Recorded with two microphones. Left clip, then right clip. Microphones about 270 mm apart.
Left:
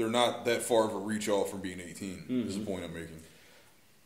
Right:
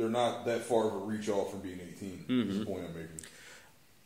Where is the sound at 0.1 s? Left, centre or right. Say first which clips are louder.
Left 3 dB; left.